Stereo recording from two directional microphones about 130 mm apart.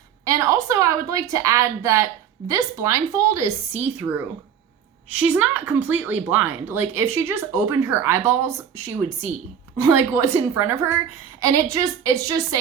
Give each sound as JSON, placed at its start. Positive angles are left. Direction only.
{"t": 0.3, "sound": "a woman's voice", "side_deg": -25}
{"t": 9.7, "sound": "speech", "side_deg": -20}